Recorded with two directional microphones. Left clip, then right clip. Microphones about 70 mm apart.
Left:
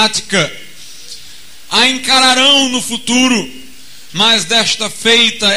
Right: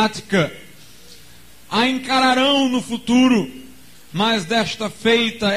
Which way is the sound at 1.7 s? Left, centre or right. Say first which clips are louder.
Left 8 dB; left.